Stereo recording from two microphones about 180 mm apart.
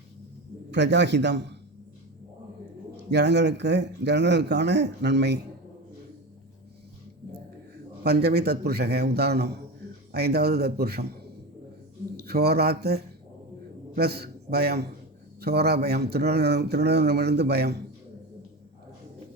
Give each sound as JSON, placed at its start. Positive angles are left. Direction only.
{"t": 0.7, "sound": "speech", "side_deg": -75}
{"t": 3.1, "sound": "speech", "side_deg": -70}
{"t": 8.0, "sound": "speech", "side_deg": -65}
{"t": 12.1, "sound": "a man's voice", "side_deg": -60}